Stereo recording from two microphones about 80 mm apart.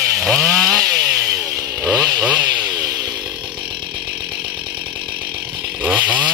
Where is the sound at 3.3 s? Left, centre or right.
Right.